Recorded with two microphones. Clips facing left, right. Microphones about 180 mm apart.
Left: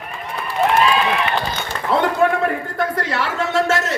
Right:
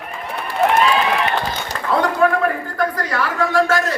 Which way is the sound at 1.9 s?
25° left (ahead or behind).